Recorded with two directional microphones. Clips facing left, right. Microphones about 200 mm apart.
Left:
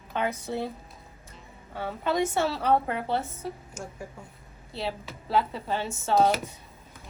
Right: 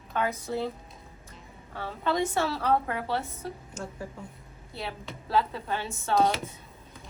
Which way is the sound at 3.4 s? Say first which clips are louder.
Left 1 dB; 10° left (ahead or behind).